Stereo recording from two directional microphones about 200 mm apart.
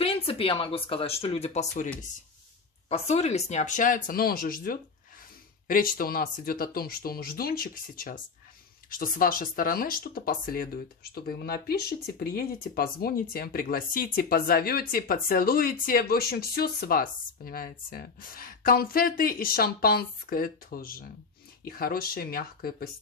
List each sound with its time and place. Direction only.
0.0 s speech: 30° left (ahead or behind)
2.9 s speech: 35° left (ahead or behind)